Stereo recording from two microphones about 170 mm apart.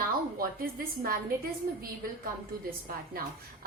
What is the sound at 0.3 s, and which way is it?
Speech, 60° right (ahead or behind).